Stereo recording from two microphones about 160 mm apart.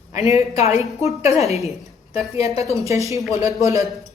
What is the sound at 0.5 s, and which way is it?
Speech, 40° left (ahead or behind).